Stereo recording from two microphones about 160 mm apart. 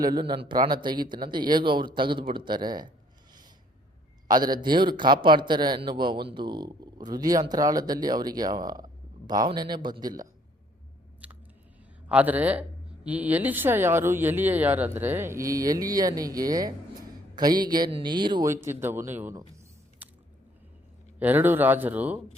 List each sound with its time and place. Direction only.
0.0 s speech: 25° right (ahead or behind)
4.3 s speech: 25° right (ahead or behind)
11.2 s chewing: 10° right (ahead or behind)
12.0 s speech: 10° right (ahead or behind); by 18.5 s 25° right (ahead or behind)
18.5 s speech: 15° right (ahead or behind)
20.0 s biting: 10° right (ahead or behind)
21.2 s speech: 10° right (ahead or behind)